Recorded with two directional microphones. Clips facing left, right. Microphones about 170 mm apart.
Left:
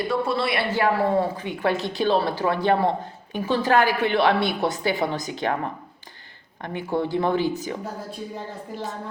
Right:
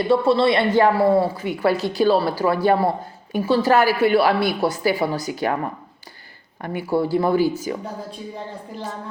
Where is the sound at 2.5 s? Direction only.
5° right (ahead or behind).